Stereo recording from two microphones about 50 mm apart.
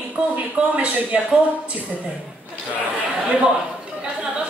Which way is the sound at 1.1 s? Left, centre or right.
Centre.